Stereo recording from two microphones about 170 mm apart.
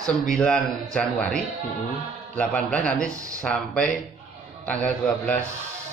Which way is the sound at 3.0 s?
20° right (ahead or behind).